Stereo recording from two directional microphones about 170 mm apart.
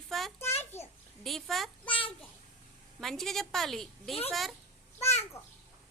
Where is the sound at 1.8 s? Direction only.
30° left (ahead or behind).